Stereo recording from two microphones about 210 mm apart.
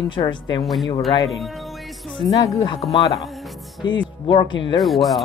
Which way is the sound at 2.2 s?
15° left (ahead or behind).